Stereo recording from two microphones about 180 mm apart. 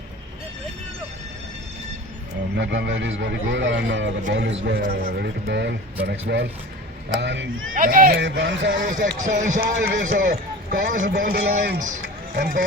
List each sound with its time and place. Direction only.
2.6 s a man's voice: 75° right (ahead or behind)
7.2 s a man's voice: 75° right (ahead or behind)
7.7 s speech: 50° right (ahead or behind)
8.2 s music: 90° right
9.1 s speech: 45° right (ahead or behind)